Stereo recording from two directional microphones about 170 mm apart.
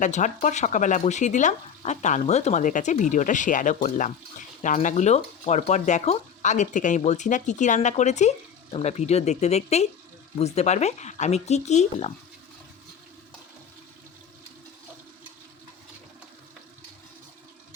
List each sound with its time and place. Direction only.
0.0 s speech: 45° left (ahead or behind)